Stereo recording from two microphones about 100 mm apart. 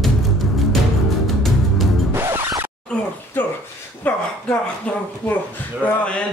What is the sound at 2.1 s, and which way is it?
Music, 20° right (ahead or behind).